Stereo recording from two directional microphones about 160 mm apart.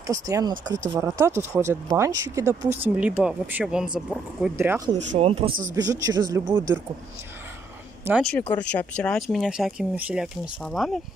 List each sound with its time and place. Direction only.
0.0 s speech: 20° right (ahead or behind); by 4.5 s 5° right (ahead or behind)
4.6 s speech: 20° right (ahead or behind)
4.9 s speech: 45° right (ahead or behind)
5.8 s speech: 25° right (ahead or behind)
8.2 s speech: 5° left (ahead or behind)